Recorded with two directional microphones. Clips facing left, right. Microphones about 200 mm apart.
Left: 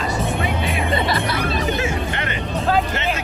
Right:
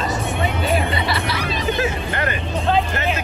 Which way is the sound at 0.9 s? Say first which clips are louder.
Left 2 dB; 50° left (ahead or behind).